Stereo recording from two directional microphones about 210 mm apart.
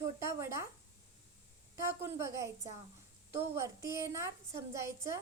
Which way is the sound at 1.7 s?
15° right (ahead or behind).